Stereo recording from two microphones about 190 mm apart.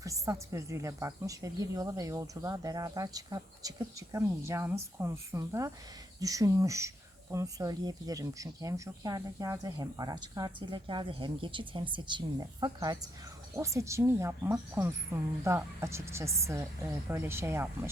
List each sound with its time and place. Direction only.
0.0 s a woman's voice: 15° right (ahead or behind)